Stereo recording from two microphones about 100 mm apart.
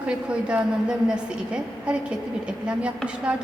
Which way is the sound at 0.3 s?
10° right (ahead or behind).